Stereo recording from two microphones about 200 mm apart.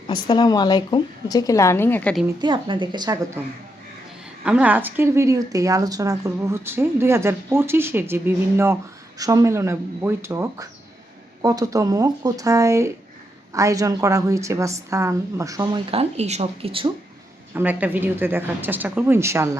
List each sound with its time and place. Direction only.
0.1 s a woman's voice: 20° left (ahead or behind)
2.2 s a woman's voice: 20° right (ahead or behind)
4.4 s speech: 10° right (ahead or behind); by 16.9 s 30° right (ahead or behind)
17.5 s speech: 10° right (ahead or behind)